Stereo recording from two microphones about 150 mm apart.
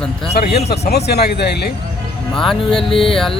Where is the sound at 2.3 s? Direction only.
5° left (ahead or behind).